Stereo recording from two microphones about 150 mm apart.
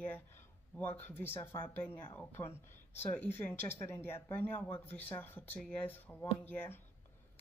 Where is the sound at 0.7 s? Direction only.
10° left (ahead or behind).